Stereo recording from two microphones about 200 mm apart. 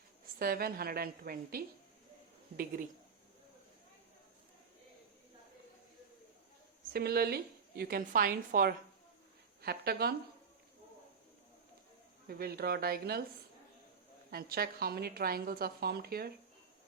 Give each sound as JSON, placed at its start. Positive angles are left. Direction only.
{"t": 0.3, "sound": "a woman's voice", "side_deg": -50}
{"t": 6.9, "sound": "a woman's voice", "side_deg": -50}
{"t": 12.3, "sound": "a woman's voice", "side_deg": -50}
{"t": 14.3, "sound": "a woman's voice", "side_deg": -50}